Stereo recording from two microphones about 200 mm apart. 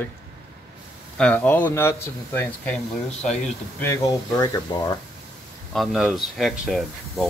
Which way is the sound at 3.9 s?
15° left (ahead or behind).